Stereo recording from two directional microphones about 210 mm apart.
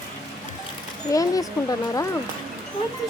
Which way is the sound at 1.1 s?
15° left (ahead or behind).